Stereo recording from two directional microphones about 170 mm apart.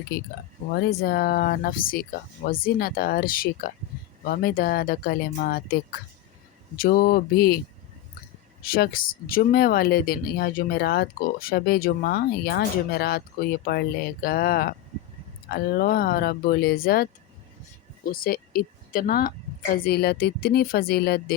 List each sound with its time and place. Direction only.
0.1 s speech: 70° left (ahead or behind)
8.6 s speech: 60° left (ahead or behind)